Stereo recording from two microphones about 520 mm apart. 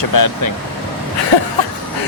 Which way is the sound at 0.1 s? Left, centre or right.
Left.